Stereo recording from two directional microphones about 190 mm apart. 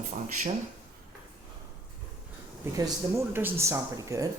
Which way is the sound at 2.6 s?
15° right (ahead or behind).